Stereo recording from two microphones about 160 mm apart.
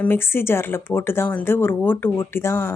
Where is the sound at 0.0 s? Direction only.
15° left (ahead or behind).